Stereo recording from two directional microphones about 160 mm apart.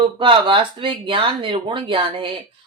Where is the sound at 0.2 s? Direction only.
30° right (ahead or behind).